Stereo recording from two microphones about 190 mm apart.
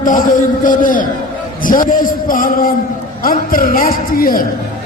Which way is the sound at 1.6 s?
45° left (ahead or behind).